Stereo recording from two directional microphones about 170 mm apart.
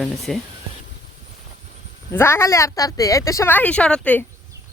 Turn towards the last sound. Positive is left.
turn(degrees=5)  # may be behind; listen again after turning